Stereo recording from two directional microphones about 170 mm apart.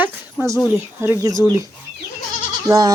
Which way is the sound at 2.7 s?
25° right (ahead or behind).